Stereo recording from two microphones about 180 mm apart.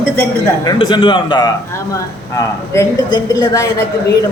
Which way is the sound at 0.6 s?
25° left (ahead or behind).